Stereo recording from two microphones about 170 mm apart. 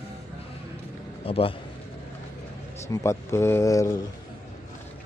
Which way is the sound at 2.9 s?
15° left (ahead or behind).